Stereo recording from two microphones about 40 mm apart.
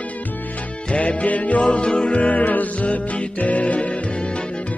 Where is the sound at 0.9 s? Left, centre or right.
Left.